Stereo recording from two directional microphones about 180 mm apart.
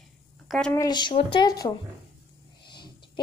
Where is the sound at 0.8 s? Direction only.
25° left (ahead or behind).